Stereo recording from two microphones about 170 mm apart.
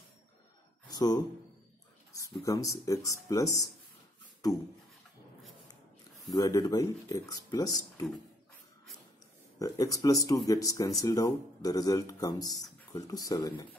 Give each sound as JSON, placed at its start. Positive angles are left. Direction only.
{"t": 0.8, "sound": "a sound", "side_deg": 25}
{"t": 2.1, "sound": "speech", "side_deg": 20}
{"t": 6.3, "sound": "speech", "side_deg": 20}
{"t": 9.6, "sound": "speech", "side_deg": 20}